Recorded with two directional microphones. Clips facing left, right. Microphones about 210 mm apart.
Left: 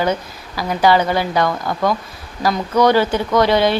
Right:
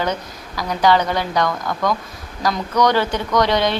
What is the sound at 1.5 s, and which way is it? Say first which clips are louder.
Speech: left 3 dB; 30° left (ahead or behind).